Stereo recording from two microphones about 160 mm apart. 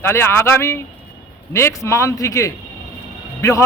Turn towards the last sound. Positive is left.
turn(degrees=20)  # may be behind; listen again after turning